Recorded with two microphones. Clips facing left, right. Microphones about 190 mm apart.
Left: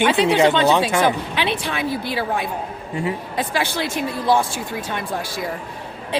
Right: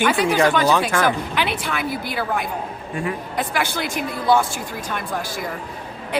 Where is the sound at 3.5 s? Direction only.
25° left (ahead or behind).